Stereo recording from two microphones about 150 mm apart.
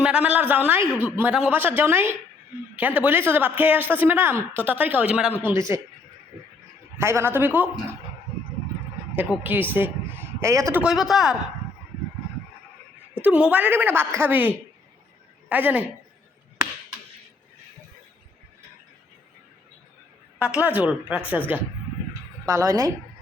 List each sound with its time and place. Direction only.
0.0 s speech: 10° right (ahead or behind)
7.0 s speech: 15° right (ahead or behind)
9.1 s speech: 10° right (ahead or behind)
10.8 s a man's voice: centre (ahead or behind)
13.2 s a woman's voice: 10° right (ahead or behind)
20.4 s speech: 10° right (ahead or behind)
22.4 s speech: 20° right (ahead or behind)